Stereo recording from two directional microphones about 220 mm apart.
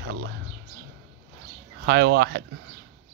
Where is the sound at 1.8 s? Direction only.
50° right (ahead or behind).